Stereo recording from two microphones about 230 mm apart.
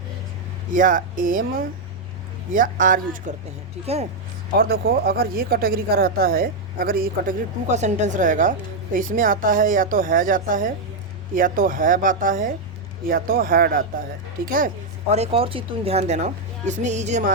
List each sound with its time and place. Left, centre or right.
0.7 s speech: right
4.5 s speech: right
15.1 s speech: right